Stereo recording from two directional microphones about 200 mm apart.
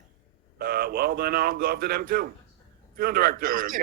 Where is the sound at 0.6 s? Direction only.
50° right (ahead or behind).